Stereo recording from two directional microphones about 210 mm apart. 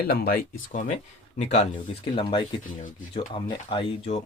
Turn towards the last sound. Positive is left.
turn(degrees=30)  # may be behind; listen again after turning